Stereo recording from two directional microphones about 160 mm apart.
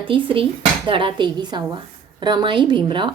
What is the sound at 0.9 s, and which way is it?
Speech, 30° right (ahead or behind).